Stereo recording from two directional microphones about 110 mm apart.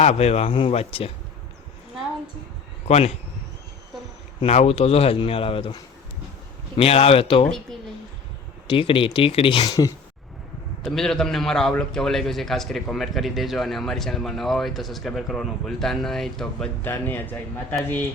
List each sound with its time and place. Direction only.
0.0 s speech: 80° left; by 1.1 s 60° left (ahead or behind)
2.8 s speech: 75° left (ahead or behind)
4.4 s speech: 70° left (ahead or behind); by 5.7 s 55° left (ahead or behind)
6.7 s speech: 65° left (ahead or behind)
8.6 s speech: 55° left (ahead or behind)
10.8 s a man's voice: 5° left (ahead or behind)
16.8 s a man's voice: 20° left (ahead or behind)